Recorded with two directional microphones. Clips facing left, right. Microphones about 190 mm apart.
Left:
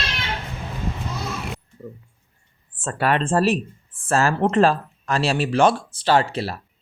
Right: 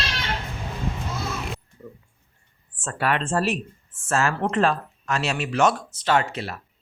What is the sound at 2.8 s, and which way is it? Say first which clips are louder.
Speech: left 3 dB; 35° left (ahead or behind).